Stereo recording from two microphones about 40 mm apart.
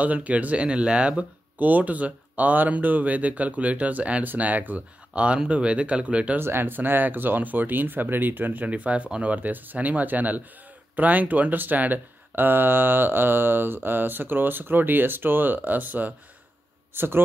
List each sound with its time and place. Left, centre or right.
0.0 s speech: right
0.7 s speech: right
1.6 s speech: right
4.2 s speech: right
5.1 s speech: right
6.4 s speech: right
8.6 s speech: right
16.9 s a man's voice: right